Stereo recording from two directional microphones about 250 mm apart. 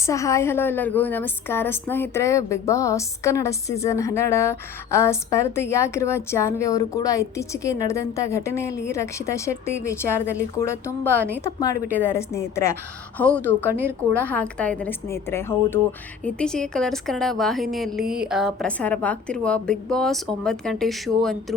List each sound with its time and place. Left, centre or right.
0.0 s a woman's voice: centre
13.7 s a woman's voice: centre
14.3 s a woman's voice: centre